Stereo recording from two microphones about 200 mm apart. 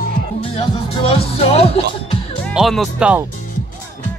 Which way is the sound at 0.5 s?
30° left (ahead or behind).